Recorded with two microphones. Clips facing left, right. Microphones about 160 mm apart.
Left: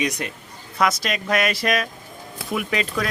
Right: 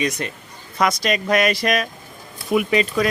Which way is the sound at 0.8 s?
Centre (ahead or behind).